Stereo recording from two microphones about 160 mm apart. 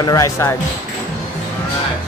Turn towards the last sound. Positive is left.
turn(degrees=20)  # may be behind; listen again after turning